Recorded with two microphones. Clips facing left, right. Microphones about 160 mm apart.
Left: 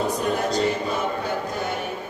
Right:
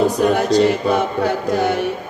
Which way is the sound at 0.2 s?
80° right.